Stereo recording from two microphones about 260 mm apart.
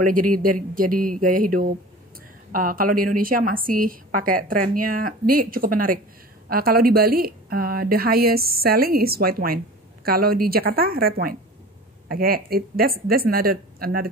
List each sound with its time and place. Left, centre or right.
0.0 s a woman's voice: right